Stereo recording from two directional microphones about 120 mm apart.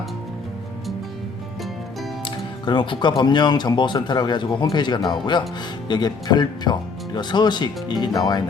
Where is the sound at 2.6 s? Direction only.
40° left (ahead or behind).